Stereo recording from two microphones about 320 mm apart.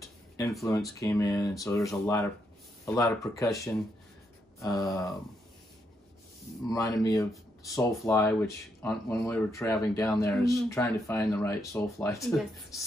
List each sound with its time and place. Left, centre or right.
0.4 s speech: centre
6.7 s speech: centre